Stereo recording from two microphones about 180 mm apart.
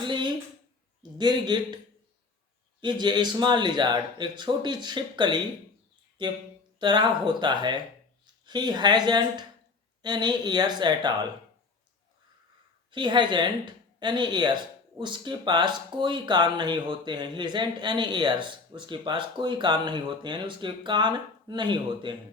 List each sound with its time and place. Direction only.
0.0 s a sound: 25° right (ahead or behind)
1.2 s speech: 25° right (ahead or behind)
2.8 s speech: 25° right (ahead or behind)
12.9 s speech: 25° right (ahead or behind)